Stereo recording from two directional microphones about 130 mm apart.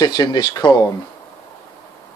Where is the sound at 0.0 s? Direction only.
35° left (ahead or behind).